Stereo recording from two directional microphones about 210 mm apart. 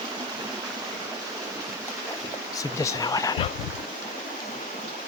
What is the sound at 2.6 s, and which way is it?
Speech, 15° left (ahead or behind).